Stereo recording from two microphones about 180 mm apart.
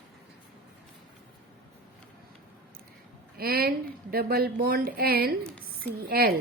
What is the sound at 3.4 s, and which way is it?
A woman's voice, 55° right (ahead or behind).